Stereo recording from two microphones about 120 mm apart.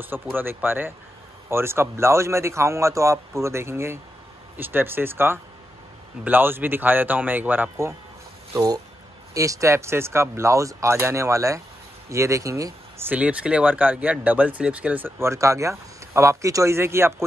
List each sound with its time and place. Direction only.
0.0 s a man's voice: 15° right (ahead or behind)
8.5 s speech: 30° right (ahead or behind)
13.1 s a man's voice: 10° right (ahead or behind)